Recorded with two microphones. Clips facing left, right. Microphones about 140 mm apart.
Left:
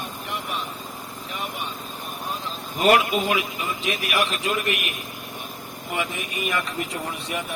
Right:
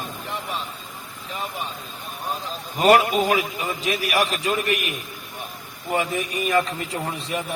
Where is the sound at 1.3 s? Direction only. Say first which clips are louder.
Right 2 dB; 35° right (ahead or behind).